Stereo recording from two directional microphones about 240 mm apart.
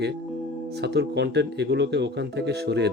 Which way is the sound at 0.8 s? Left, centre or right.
Right.